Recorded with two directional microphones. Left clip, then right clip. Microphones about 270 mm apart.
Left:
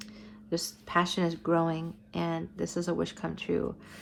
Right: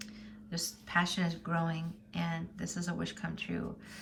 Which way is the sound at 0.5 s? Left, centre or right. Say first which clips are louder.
Left 4 dB; centre.